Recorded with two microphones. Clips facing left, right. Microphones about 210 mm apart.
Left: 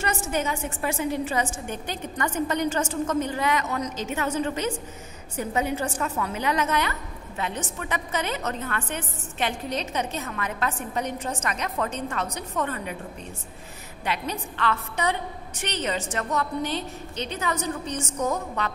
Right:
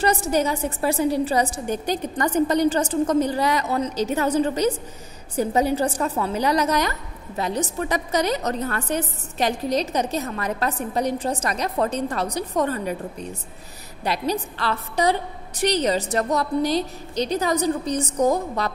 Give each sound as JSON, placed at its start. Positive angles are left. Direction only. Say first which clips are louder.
{"t": 0.0, "sound": "a woman's voice", "louder": "right 6 dB", "side_deg": -35}
{"t": 14.0, "sound": "a woman's voice", "louder": "right 6 dB", "side_deg": -35}